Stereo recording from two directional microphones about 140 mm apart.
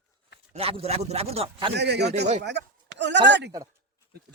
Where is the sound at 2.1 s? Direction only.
55° right (ahead or behind).